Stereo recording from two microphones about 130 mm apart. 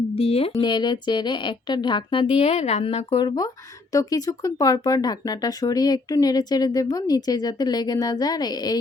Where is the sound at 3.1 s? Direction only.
35° left (ahead or behind).